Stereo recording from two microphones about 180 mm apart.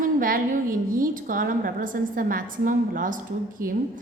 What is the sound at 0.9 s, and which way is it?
A woman's voice, 50° right (ahead or behind).